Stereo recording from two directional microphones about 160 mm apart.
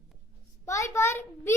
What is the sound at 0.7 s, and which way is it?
Child singing, 15° left (ahead or behind).